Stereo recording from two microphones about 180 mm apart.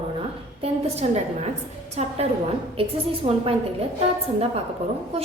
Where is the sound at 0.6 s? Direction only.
35° right (ahead or behind).